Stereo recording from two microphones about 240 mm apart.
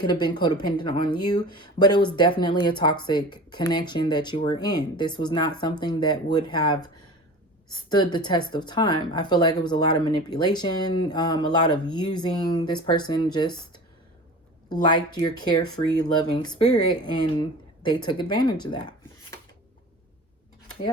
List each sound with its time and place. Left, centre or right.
0.0 s speech: centre